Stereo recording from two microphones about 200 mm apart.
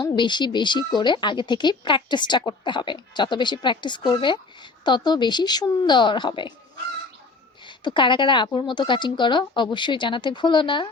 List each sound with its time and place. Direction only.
0.0 s speech: 20° left (ahead or behind)
7.7 s speech: 25° left (ahead or behind)